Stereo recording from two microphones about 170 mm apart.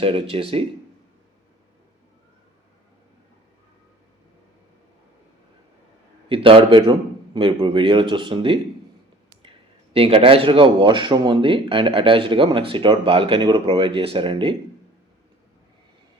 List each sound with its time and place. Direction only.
0.0 s speech: 30° right (ahead or behind)
6.2 s speech: 30° right (ahead or behind)